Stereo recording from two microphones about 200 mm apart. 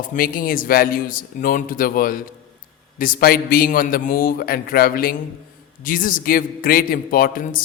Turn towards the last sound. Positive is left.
turn(degrees=45)  # may be behind; listen again after turning